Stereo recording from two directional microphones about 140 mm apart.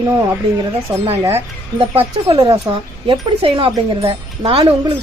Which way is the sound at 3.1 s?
35° right (ahead or behind).